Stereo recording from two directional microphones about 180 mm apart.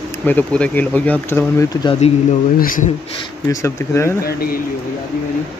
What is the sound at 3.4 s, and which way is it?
Speech, 15° left (ahead or behind).